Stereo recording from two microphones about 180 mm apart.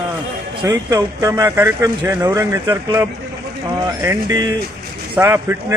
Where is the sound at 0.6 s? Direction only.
15° right (ahead or behind).